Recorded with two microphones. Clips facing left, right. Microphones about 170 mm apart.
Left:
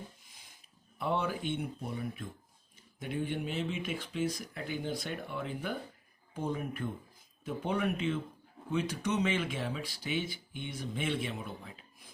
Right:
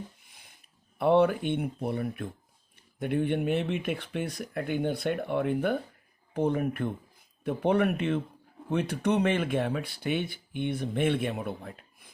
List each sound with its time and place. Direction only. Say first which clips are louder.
0.9 s speech: right 11 dB; 60° right (ahead or behind)